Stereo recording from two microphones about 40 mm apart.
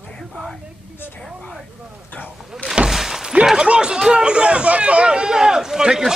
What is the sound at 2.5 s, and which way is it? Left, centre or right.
Vehicle, centre.